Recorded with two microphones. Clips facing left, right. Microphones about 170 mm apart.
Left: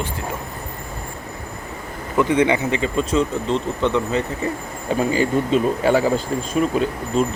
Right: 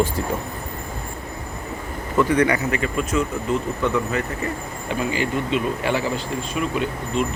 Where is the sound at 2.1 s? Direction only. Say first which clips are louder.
Left 1 dB; 20° left (ahead or behind).